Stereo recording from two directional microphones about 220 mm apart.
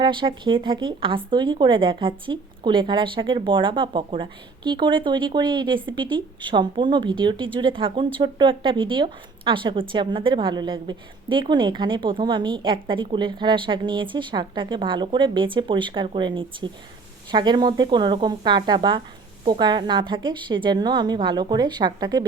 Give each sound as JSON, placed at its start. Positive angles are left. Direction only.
{"t": 0.0, "sound": "a woman's voice", "side_deg": -20}